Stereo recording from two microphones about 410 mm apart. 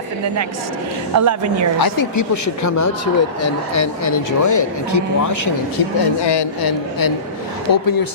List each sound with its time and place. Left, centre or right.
1.1 s a woman's voice: right
1.8 s speech: left
6.1 s a woman's voice: left